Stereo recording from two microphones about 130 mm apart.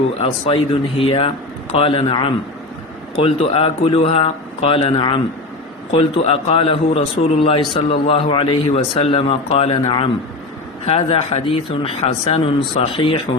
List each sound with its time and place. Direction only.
0.2 s a man's voice: 45° left (ahead or behind)